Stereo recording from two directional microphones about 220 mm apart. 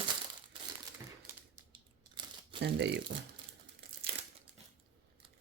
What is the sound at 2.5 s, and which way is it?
Speech, 50° right (ahead or behind).